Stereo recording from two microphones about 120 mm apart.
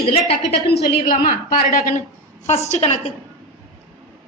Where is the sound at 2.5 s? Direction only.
65° left (ahead or behind).